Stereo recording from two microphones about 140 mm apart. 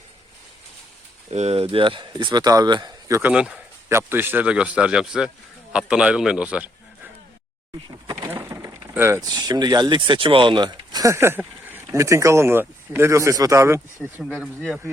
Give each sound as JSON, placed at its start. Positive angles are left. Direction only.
{"t": 1.3, "sound": "speech", "side_deg": -50}
{"t": 3.2, "sound": "a man's voice", "side_deg": -10}
{"t": 3.8, "sound": "a man's voice", "side_deg": -15}
{"t": 7.9, "sound": "a sound", "side_deg": -30}
{"t": 9.3, "sound": "speech", "side_deg": -30}
{"t": 14.2, "sound": "speech", "side_deg": 0}